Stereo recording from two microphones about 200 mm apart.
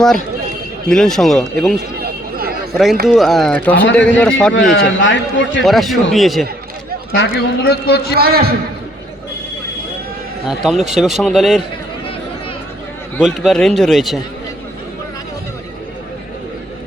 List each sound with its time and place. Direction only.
0.9 s speech: 5° left (ahead or behind)
2.0 s a sound: 50° right (ahead or behind)
3.1 s speech: centre (ahead or behind)
4.9 s a man's voice: 65° left (ahead or behind)
5.6 s speech: centre (ahead or behind)
7.1 s a man's voice: 55° left (ahead or behind)
8.1 s a man's voice: 50° right (ahead or behind)
10.6 s speech: centre (ahead or behind)
13.1 s speech: centre (ahead or behind)